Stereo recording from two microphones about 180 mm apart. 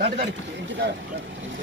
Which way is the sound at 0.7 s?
85° right.